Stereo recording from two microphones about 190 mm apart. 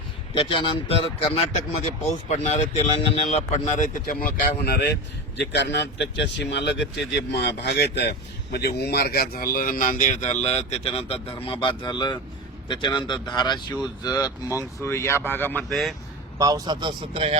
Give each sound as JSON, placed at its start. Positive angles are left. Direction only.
{"t": 0.3, "sound": "speech", "side_deg": 25}
{"t": 4.0, "sound": "a man's voice", "side_deg": 50}
{"t": 16.4, "sound": "speech", "side_deg": -20}